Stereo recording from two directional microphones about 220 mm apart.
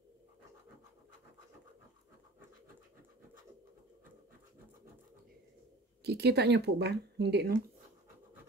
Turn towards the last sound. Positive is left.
turn(degrees=-50)  # may be behind; listen again after turning